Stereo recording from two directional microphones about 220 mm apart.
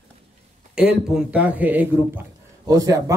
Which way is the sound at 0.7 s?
5° right (ahead or behind).